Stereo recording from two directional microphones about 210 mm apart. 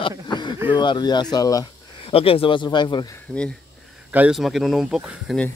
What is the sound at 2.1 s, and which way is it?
Speech, 25° left (ahead or behind).